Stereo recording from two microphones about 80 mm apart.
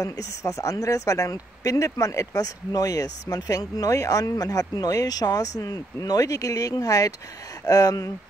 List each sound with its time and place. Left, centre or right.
0.0 s speech: left